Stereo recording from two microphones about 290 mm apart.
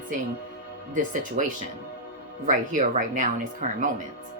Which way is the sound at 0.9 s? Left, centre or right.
Right.